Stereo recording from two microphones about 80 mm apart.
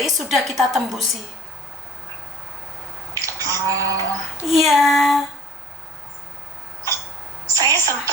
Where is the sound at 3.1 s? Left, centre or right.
Right.